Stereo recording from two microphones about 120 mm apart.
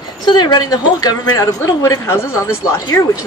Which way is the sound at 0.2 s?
35° left (ahead or behind).